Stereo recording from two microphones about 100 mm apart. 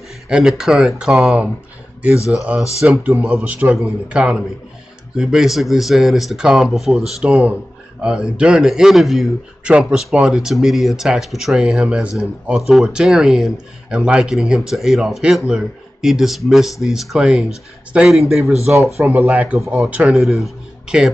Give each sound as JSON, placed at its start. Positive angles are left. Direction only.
{"t": 0.3, "sound": "speech", "side_deg": -5}
{"t": 2.1, "sound": "speech", "side_deg": 30}
{"t": 3.0, "sound": "a man's voice", "side_deg": -15}
{"t": 20.2, "sound": "speech", "side_deg": 0}